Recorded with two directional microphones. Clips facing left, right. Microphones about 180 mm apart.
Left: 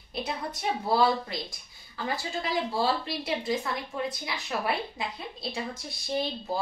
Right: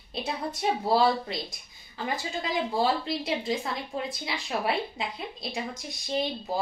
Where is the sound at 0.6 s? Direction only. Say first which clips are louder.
Right 1 dB; 20° right (ahead or behind).